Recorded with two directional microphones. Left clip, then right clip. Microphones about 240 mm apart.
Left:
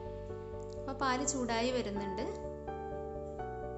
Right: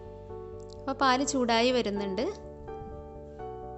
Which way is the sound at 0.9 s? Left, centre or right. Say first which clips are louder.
Right 8 dB; right.